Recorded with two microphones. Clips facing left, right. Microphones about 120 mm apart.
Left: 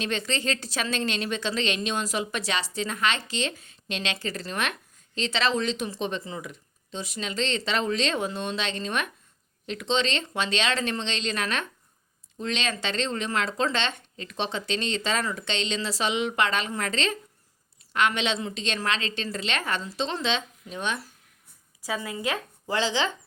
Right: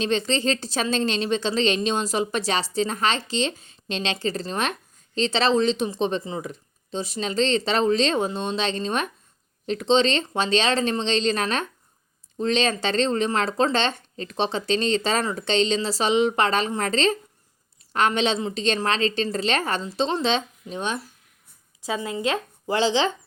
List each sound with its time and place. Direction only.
0.0 s a woman's voice: 30° right (ahead or behind)
21.8 s speech: 25° right (ahead or behind)